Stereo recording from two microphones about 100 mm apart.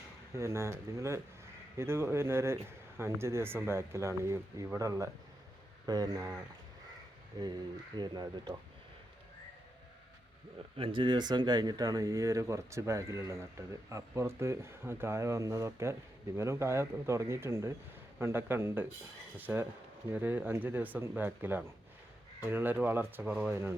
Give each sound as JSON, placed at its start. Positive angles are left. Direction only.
{"t": 0.3, "sound": "speech", "side_deg": -25}
{"t": 7.3, "sound": "speech", "side_deg": -40}
{"t": 10.8, "sound": "speech", "side_deg": -60}